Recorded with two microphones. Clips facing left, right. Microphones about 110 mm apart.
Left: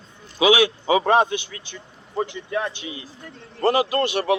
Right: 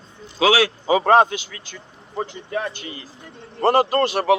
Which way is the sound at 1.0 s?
50° right (ahead or behind).